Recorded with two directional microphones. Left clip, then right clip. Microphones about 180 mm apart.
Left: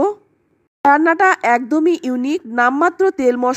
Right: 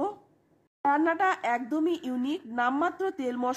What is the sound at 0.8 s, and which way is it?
Speech, 40° left (ahead or behind).